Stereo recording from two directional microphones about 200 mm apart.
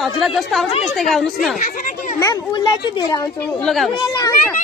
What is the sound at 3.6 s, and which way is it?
Speech, centre (ahead or behind).